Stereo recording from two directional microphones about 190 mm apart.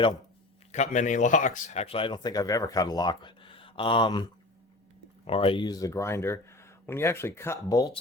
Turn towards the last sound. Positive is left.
turn(degrees=20)  # may be behind; listen again after turning